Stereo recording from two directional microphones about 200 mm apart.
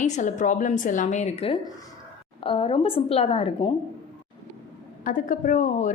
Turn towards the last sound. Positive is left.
turn(degrees=40)  # may be behind; listen again after turning